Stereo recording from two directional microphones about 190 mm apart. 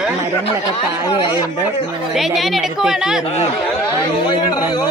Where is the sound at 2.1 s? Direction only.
Centre (ahead or behind).